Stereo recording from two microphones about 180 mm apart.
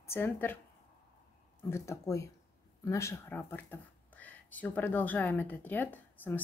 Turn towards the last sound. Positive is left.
turn(degrees=10)  # may be behind; listen again after turning